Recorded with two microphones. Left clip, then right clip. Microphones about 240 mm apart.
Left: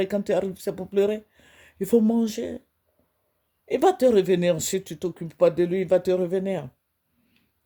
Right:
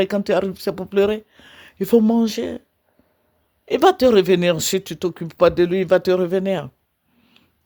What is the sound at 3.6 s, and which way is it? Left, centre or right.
Speech, centre.